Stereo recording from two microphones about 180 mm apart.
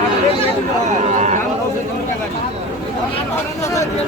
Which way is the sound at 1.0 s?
40° right (ahead or behind).